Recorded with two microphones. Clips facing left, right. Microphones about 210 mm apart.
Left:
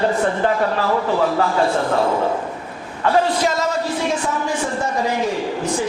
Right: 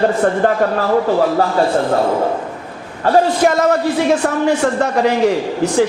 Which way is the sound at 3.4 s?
55° right (ahead or behind).